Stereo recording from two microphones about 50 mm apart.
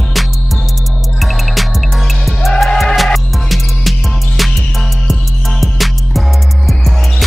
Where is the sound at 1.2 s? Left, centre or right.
Centre.